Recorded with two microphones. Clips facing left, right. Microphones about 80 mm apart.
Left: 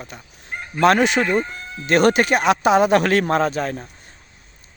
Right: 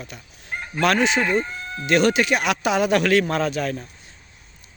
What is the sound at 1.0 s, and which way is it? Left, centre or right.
Speech, left.